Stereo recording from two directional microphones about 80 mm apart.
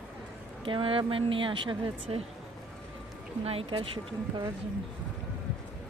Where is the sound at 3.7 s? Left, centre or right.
Right.